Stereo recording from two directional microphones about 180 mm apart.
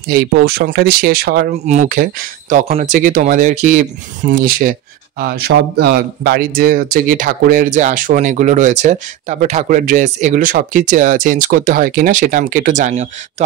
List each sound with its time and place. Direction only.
0.1 s speech: 60° right (ahead or behind)
1.7 s speech: 45° right (ahead or behind)